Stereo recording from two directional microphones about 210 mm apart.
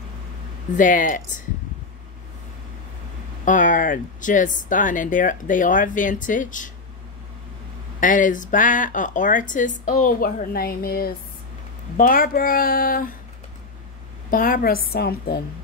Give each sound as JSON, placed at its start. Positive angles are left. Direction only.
{"t": 0.7, "sound": "speech", "side_deg": 40}
{"t": 3.4, "sound": "speech", "side_deg": 40}
{"t": 8.0, "sound": "speech", "side_deg": 40}
{"t": 14.3, "sound": "speech", "side_deg": 40}